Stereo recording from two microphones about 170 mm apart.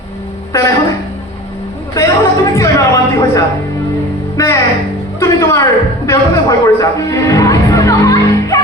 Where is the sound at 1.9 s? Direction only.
20° left (ahead or behind).